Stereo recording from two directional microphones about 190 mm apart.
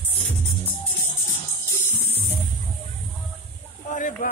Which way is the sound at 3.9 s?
45° left (ahead or behind).